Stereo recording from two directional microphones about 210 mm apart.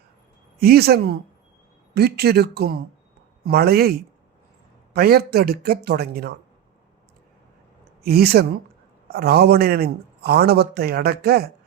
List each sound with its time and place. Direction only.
0.6 s a man's voice: 45° right (ahead or behind)
4.9 s a man's voice: 45° right (ahead or behind)
8.0 s a man's voice: 50° right (ahead or behind)